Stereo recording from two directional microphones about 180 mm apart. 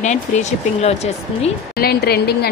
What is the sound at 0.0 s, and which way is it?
Speech, 40° left (ahead or behind).